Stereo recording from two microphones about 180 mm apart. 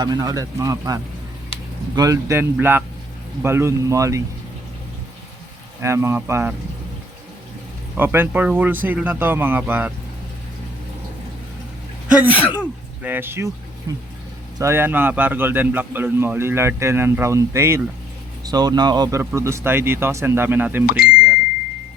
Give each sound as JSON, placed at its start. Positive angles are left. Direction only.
{"t": 0.0, "sound": "speech", "side_deg": -20}
{"t": 2.0, "sound": "a man's voice", "side_deg": -15}
{"t": 5.8, "sound": "a man's voice", "side_deg": -15}
{"t": 7.9, "sound": "a man's voice", "side_deg": -10}
{"t": 12.0, "sound": "a sound", "side_deg": -10}
{"t": 12.5, "sound": "throat clearing", "side_deg": -10}
{"t": 13.9, "sound": "a man's voice", "side_deg": -20}
{"t": 20.8, "sound": "a sound", "side_deg": 55}